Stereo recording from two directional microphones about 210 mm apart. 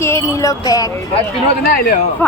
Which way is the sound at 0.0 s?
15° left (ahead or behind).